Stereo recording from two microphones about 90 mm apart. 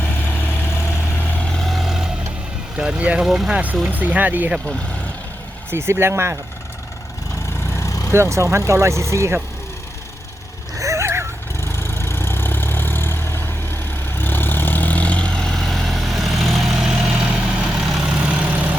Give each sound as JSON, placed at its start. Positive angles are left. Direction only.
{"t": 0.0, "sound": "vehicle", "side_deg": 20}
{"t": 1.5, "sound": "vehicle", "side_deg": 0}
{"t": 2.7, "sound": "speech", "side_deg": -10}
{"t": 3.8, "sound": "speech", "side_deg": -15}
{"t": 5.7, "sound": "speech", "side_deg": -30}
{"t": 7.8, "sound": "vehicle", "side_deg": 35}
{"t": 8.1, "sound": "speech", "side_deg": -30}
{"t": 10.8, "sound": "a sound", "side_deg": -35}
{"t": 11.6, "sound": "vehicle", "side_deg": 30}